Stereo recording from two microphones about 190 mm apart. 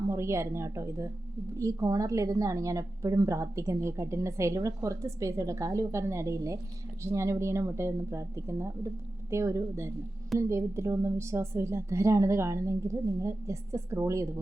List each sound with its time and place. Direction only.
0.1 s a woman's voice: 15° right (ahead or behind)